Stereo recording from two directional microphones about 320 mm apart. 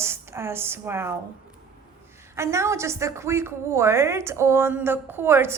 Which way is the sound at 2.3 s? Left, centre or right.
Centre.